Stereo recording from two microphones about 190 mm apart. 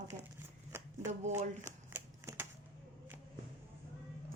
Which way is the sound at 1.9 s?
10° right (ahead or behind).